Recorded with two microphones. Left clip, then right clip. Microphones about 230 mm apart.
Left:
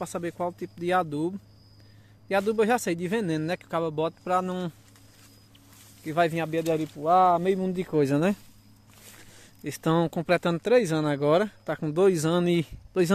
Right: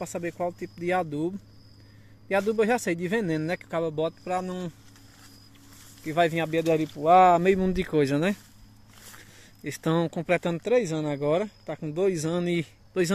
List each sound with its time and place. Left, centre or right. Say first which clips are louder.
0.0 s speech: even; centre
6.0 s speech: right 1 dB; centre
8.0 s speech: left 1 dB; centre
9.4 s speech: left 1 dB; centre